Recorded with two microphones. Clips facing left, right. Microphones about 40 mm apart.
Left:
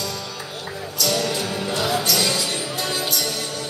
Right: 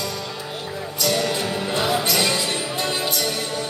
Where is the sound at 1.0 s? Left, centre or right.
Centre.